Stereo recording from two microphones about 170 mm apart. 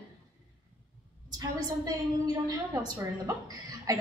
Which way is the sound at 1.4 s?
25° right (ahead or behind).